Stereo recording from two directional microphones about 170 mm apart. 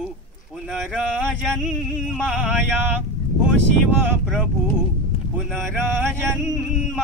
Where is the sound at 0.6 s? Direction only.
Centre (ahead or behind).